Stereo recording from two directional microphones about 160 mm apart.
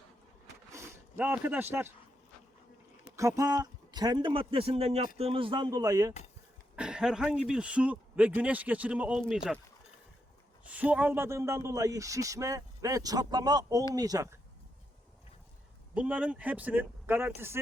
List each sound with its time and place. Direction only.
0.7 s a sound: 15° right (ahead or behind)
3.2 s speech: 20° right (ahead or behind)
6.7 s speech: 5° right (ahead or behind)
10.7 s speech: 10° right (ahead or behind)
16.0 s speech: 10° right (ahead or behind)